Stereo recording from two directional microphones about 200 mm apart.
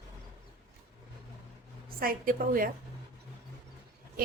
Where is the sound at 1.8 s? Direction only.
45° right (ahead or behind).